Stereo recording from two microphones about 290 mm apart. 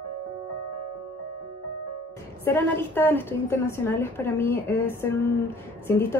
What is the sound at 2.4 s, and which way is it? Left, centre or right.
A woman's voice, centre.